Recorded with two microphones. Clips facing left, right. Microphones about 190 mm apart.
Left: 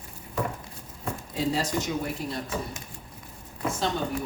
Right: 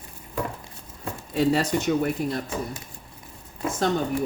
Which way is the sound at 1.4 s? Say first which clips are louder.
Right 6 dB; 60° right (ahead or behind).